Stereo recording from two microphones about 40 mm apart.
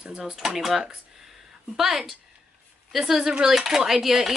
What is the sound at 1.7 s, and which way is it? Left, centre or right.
Speech, centre.